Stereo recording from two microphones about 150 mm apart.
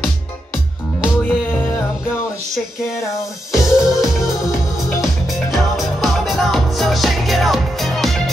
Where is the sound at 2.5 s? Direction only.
Centre (ahead or behind).